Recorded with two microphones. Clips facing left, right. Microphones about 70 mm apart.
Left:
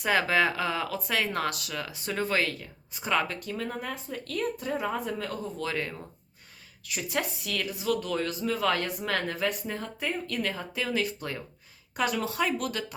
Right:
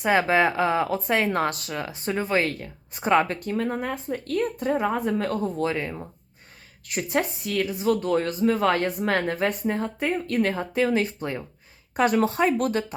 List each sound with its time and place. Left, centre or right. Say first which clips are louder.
0.0 s speech: right 4 dB; right
2.5 s speech: right 4 dB; right
5.6 s speech: right 5 dB; centre
6.8 s speech: right 6 dB; right
11.9 s speech: right 7 dB; right